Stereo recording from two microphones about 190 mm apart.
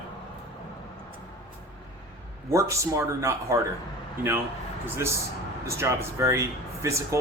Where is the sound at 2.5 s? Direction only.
15° right (ahead or behind).